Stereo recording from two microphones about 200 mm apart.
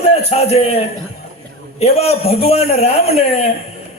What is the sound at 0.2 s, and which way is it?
A man's voice, 30° left (ahead or behind).